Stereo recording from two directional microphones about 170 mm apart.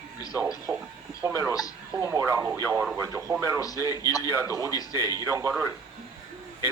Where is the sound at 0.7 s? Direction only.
Centre (ahead or behind).